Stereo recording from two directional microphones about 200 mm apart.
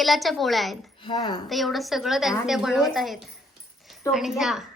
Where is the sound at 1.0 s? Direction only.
20° left (ahead or behind).